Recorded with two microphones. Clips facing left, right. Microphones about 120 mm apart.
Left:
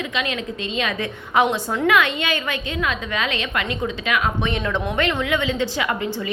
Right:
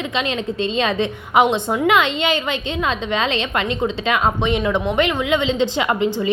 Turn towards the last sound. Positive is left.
turn(degrees=-20)  # may be behind; listen again after turning